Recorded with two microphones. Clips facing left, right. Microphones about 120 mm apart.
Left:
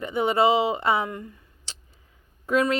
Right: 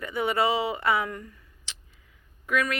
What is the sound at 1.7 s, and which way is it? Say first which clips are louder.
Tick: left 1 dB; 35° left (ahead or behind).